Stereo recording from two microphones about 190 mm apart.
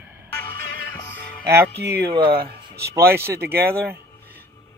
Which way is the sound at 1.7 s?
60° right (ahead or behind).